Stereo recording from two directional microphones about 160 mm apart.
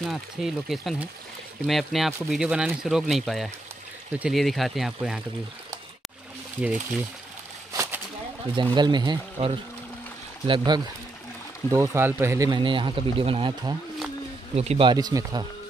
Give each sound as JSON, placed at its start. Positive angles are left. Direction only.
{"t": 0.1, "sound": "speech", "side_deg": 0}
{"t": 7.7, "sound": "a sound", "side_deg": -15}
{"t": 8.5, "sound": "speech", "side_deg": -25}
{"t": 11.7, "sound": "speech", "side_deg": -20}
{"t": 12.4, "sound": "speech", "side_deg": -30}
{"t": 14.9, "sound": "speech", "side_deg": -25}